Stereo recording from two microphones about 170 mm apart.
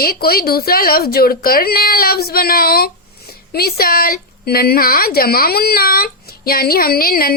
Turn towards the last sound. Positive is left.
turn(degrees=60)  # may be behind; listen again after turning